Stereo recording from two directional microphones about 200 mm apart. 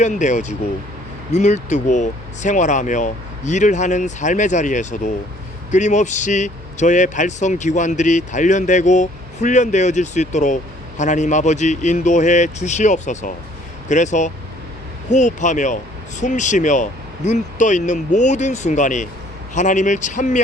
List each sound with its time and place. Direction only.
0.0 s speech: 35° left (ahead or behind)